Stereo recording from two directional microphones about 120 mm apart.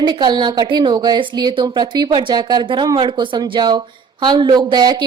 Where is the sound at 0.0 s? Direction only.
35° right (ahead or behind).